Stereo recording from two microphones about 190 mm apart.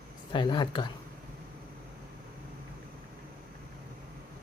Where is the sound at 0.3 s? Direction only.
25° left (ahead or behind).